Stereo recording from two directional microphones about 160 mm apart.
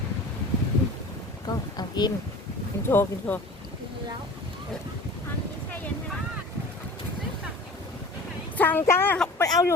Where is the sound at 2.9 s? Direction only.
10° left (ahead or behind).